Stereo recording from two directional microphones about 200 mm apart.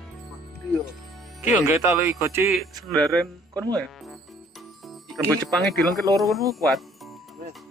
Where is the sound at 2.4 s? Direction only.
Centre (ahead or behind).